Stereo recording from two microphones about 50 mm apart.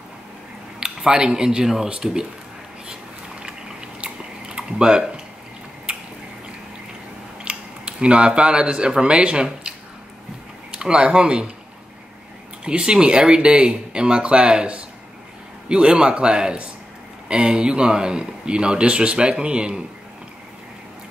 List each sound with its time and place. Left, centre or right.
0.7 s speech: centre
2.9 s a sound: centre
4.0 s chewing: centre
5.9 s drip: right
7.4 s speech: right
12.6 s speech: centre